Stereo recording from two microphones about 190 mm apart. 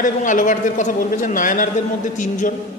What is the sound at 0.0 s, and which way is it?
A man's voice, 40° left (ahead or behind).